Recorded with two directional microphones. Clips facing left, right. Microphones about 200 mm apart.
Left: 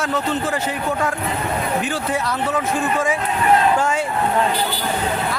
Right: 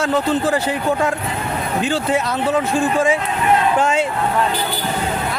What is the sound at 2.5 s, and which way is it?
Speech, 30° right (ahead or behind).